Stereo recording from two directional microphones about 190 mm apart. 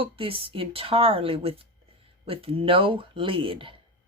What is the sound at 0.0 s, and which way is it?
Speech, 30° right (ahead or behind).